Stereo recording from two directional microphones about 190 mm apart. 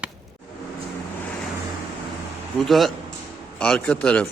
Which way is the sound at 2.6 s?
Centre (ahead or behind).